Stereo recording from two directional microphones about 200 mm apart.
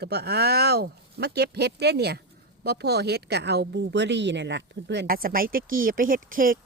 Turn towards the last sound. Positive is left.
turn(degrees=-45)  # may be behind; listen again after turning